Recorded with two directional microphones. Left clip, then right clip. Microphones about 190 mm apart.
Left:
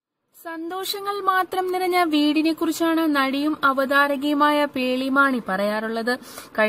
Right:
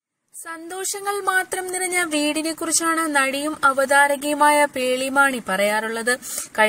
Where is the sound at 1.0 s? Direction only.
50° right (ahead or behind).